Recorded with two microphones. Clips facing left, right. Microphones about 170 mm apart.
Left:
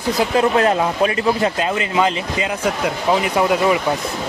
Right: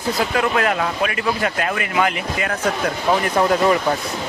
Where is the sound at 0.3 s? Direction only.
30° left (ahead or behind).